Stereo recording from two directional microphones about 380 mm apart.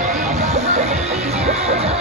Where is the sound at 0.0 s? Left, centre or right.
Centre.